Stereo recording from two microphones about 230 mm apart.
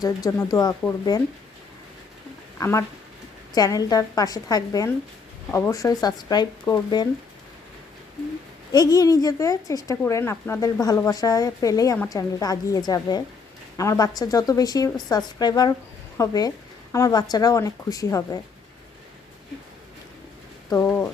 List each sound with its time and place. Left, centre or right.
0.0 s speech: centre
2.6 s speech: centre
8.7 s speech: centre
20.8 s speech: centre